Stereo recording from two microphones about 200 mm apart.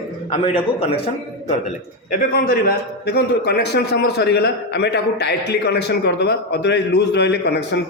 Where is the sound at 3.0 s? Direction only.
55° left (ahead or behind).